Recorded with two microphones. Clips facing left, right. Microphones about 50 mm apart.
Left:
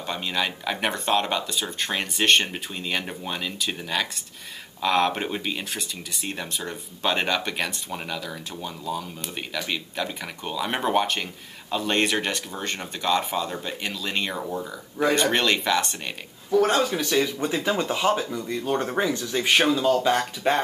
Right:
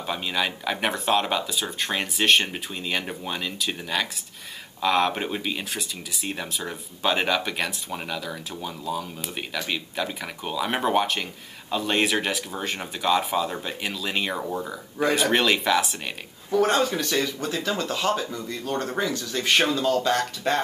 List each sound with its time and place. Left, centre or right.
0.0 s speech: centre
17.4 s speech: centre